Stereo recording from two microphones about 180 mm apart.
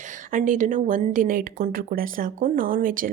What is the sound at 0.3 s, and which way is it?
Speech, 45° right (ahead or behind).